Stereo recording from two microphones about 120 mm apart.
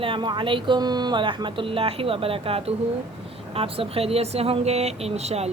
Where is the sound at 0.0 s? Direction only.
45° right (ahead or behind).